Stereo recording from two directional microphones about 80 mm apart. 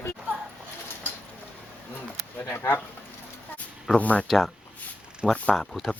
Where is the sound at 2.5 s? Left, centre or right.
Left.